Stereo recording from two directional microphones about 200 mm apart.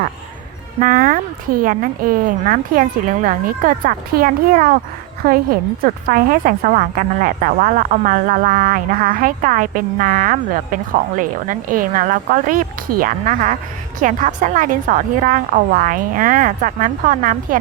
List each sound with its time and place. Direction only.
0.8 s a woman's voice: 45° right (ahead or behind)